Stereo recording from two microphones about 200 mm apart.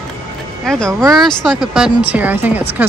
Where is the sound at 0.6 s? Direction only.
5° left (ahead or behind).